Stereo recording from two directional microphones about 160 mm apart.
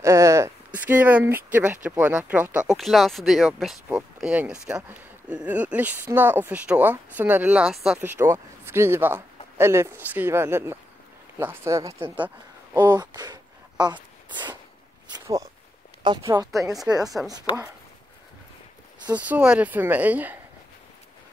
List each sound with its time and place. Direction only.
0.0 s a sound: 20° right (ahead or behind)
0.7 s speech: 10° right (ahead or behind)
8.0 s speech: 15° right (ahead or behind)
11.9 s speech: 30° right (ahead or behind)
12.9 s a sound: 25° right (ahead or behind)
16.0 s speech: 25° right (ahead or behind)
17.0 s speech: centre (ahead or behind)
17.3 s speech: 25° right (ahead or behind)
19.1 s speech: 10° right (ahead or behind)